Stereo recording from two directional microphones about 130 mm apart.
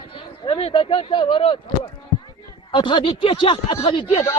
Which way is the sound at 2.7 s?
40° left (ahead or behind).